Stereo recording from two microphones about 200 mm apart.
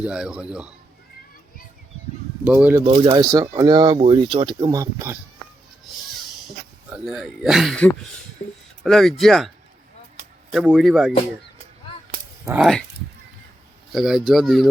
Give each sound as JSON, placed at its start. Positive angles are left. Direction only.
{"t": 0.0, "sound": "speech", "side_deg": -5}
{"t": 2.4, "sound": "speech", "side_deg": -5}
{"t": 2.8, "sound": "speech", "side_deg": -25}
{"t": 5.9, "sound": "a sound", "side_deg": 0}
{"t": 6.9, "sound": "speech", "side_deg": 0}
{"t": 10.5, "sound": "speech", "side_deg": -5}
{"t": 12.5, "sound": "speech", "side_deg": 0}
{"t": 13.9, "sound": "speech", "side_deg": 0}